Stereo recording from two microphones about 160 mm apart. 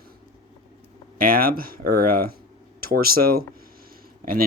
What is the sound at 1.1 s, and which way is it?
Speech, 65° right (ahead or behind).